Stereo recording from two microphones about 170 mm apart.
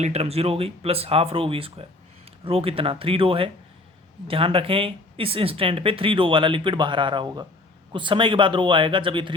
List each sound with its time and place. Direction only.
0.0 s a man's voice: 40° right (ahead or behind)